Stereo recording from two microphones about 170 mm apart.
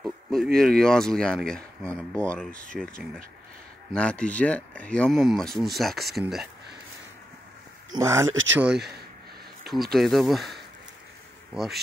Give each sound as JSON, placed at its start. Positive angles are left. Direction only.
{"t": 0.0, "sound": "a sound", "side_deg": 0}
{"t": 0.6, "sound": "speech", "side_deg": 5}
{"t": 7.9, "sound": "speech", "side_deg": -15}
{"t": 9.7, "sound": "speech", "side_deg": 0}